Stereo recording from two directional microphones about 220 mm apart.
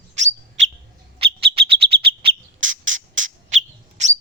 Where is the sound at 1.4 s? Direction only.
25° right (ahead or behind).